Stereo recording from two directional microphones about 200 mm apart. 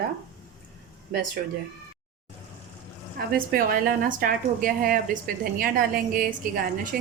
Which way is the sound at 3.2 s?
45° right (ahead or behind).